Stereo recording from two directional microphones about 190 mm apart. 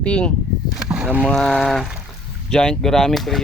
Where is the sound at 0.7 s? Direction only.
5° right (ahead or behind).